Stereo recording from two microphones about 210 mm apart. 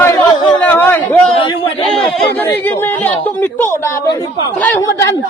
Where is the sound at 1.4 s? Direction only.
25° left (ahead or behind).